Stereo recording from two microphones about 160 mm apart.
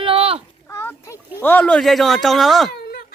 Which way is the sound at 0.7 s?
15° left (ahead or behind).